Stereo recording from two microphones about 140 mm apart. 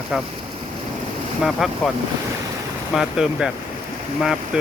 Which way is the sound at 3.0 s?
5° right (ahead or behind).